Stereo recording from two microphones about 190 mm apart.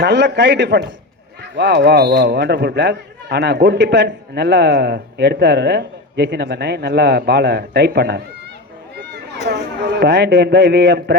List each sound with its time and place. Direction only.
0.0 s a man's voice: 60° right (ahead or behind)
9.5 s a man's voice: 60° right (ahead or behind)